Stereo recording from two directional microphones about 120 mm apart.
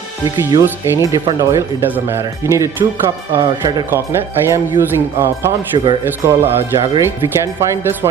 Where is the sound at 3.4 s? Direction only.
35° right (ahead or behind).